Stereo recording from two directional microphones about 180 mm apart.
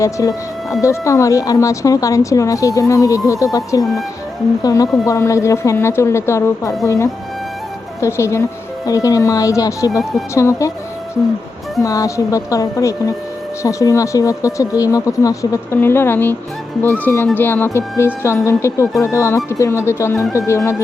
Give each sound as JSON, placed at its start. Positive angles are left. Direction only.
{"t": 0.0, "sound": "a woman's voice", "side_deg": 20}
{"t": 10.0, "sound": "speech", "side_deg": 0}
{"t": 10.3, "sound": "speech", "side_deg": 15}
{"t": 11.8, "sound": "a woman's voice", "side_deg": 20}